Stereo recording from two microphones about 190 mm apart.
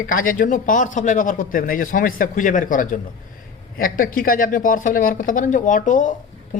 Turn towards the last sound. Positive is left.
turn(degrees=40)  # may be behind; listen again after turning